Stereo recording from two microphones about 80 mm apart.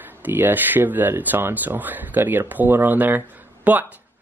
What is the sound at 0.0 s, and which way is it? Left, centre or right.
Speech, right.